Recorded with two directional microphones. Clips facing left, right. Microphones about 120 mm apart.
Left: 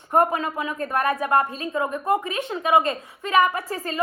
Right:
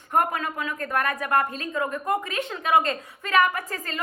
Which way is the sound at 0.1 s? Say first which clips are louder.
Left 4 dB; 25° left (ahead or behind).